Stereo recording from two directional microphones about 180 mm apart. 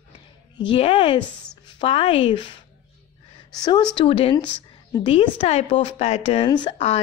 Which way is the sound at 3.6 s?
25° left (ahead or behind).